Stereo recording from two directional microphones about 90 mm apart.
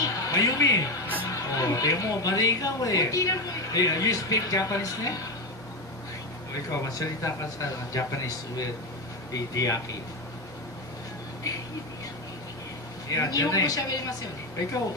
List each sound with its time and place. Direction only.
0.0 s music: 40° left (ahead or behind)
1.3 s speech: 40° left (ahead or behind)
6.5 s speech: 40° left (ahead or behind)
13.1 s speech: 40° left (ahead or behind)